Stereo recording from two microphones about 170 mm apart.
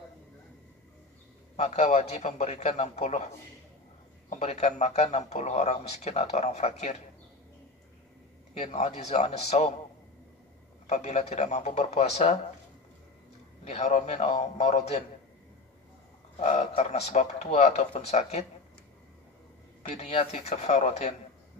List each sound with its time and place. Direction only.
1.6 s speech: 40° left (ahead or behind)
4.3 s speech: 40° left (ahead or behind)
8.5 s speech: 40° left (ahead or behind)
10.9 s speech: 40° left (ahead or behind)
13.7 s speech: 40° left (ahead or behind)
16.3 s speech: 45° left (ahead or behind)
19.8 s speech: 40° left (ahead or behind)